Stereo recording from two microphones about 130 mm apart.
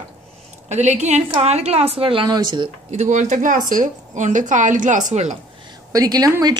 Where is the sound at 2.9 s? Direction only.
65° right (ahead or behind).